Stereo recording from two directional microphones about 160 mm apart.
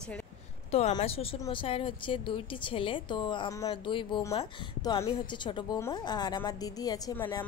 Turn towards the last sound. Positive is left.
turn(degrees=25)  # may be behind; listen again after turning